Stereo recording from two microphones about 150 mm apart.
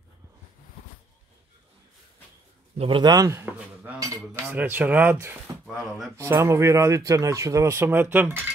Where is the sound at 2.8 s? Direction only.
35° right (ahead or behind).